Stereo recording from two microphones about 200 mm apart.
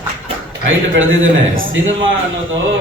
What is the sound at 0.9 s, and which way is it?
Speech, 75° right (ahead or behind).